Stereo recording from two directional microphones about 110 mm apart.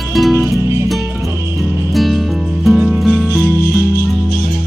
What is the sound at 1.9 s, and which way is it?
Music, centre (ahead or behind).